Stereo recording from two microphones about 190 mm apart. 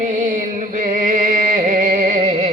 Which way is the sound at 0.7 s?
40° right (ahead or behind).